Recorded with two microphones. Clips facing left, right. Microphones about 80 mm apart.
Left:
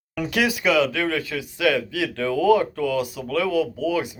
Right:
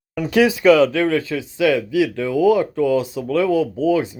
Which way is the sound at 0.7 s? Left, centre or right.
Right.